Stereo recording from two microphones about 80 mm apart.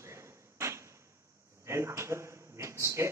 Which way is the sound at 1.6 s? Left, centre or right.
Right.